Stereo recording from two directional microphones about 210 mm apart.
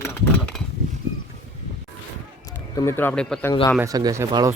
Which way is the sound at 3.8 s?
15° right (ahead or behind).